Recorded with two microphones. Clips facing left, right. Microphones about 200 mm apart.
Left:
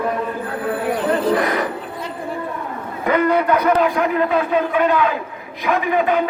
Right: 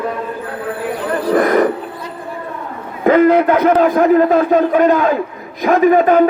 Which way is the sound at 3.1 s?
45° right (ahead or behind).